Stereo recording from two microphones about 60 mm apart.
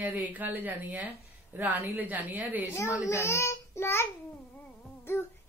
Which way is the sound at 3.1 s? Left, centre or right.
Left.